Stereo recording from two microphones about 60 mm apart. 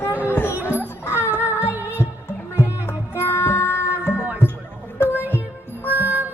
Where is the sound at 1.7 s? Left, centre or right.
Right.